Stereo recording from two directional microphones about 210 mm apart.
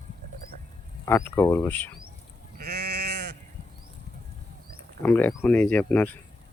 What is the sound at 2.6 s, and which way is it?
Sheep, 50° right (ahead or behind).